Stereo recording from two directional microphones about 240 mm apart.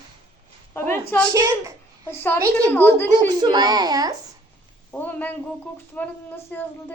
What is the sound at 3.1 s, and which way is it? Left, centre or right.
A child's voice, centre.